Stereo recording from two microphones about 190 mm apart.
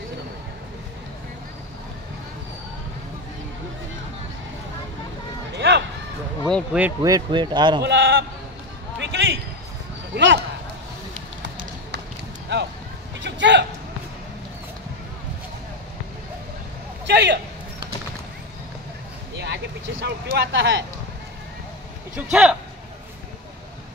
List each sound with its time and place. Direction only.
5.6 s a sound: 65° right (ahead or behind)
6.5 s speech: 5° right (ahead or behind)
7.0 s speech: 20° right (ahead or behind)
7.8 s sheep: 75° right (ahead or behind)
9.0 s a sound: 75° right (ahead or behind)
10.1 s speech: 65° right (ahead or behind)
13.2 s a sound: 70° right (ahead or behind)
17.0 s a man's voice: 65° right (ahead or behind)
19.3 s speech: 65° right (ahead or behind)
22.1 s speech: 5° right (ahead or behind)